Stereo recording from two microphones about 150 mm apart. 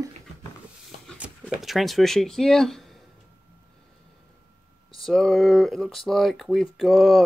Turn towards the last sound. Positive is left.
turn(degrees=0)  # may be behind; listen again after turning